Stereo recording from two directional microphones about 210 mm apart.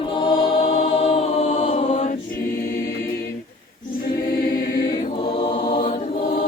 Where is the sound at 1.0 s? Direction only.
30° left (ahead or behind).